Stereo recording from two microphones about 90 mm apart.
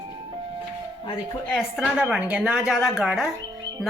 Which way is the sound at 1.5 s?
5° left (ahead or behind).